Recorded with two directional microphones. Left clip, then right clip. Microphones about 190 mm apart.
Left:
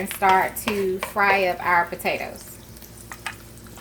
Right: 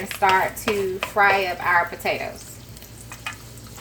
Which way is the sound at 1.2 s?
55° left (ahead or behind).